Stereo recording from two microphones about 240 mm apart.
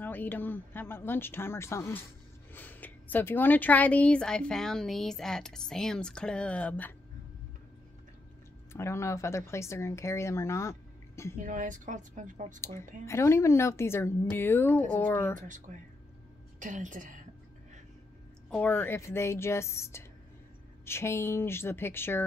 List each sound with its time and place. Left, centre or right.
0.0 s speech: centre
8.7 s speech: centre
11.3 s a woman's voice: right
12.5 s speech: centre
15.3 s a woman's voice: right
18.5 s speech: centre